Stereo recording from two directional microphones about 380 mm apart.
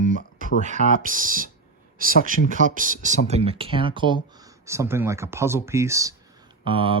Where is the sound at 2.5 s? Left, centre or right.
Centre.